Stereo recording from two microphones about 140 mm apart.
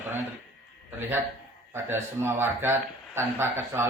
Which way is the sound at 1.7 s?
15° right (ahead or behind).